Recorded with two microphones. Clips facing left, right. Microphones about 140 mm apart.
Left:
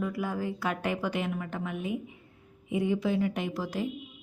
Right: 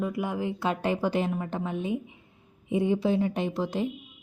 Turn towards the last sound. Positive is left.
turn(degrees=-25)  # may be behind; listen again after turning